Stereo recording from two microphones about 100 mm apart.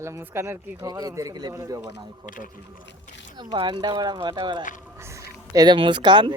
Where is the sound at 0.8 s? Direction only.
40° right (ahead or behind).